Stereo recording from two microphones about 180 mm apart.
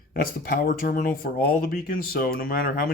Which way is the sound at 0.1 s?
55° left (ahead or behind).